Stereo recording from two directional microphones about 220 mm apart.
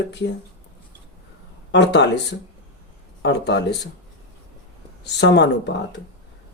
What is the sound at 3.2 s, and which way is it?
Speech, 50° left (ahead or behind).